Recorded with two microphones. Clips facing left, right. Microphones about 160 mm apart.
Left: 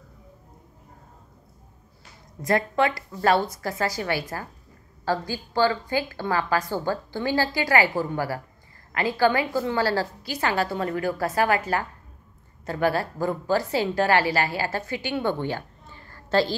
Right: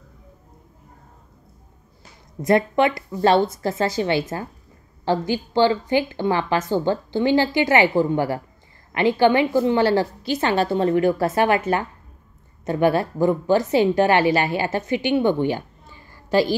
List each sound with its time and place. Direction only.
2.4 s a woman's voice: 20° right (ahead or behind)